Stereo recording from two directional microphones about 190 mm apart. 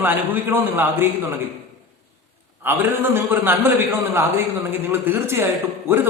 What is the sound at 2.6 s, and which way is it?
A man's voice, 10° right (ahead or behind).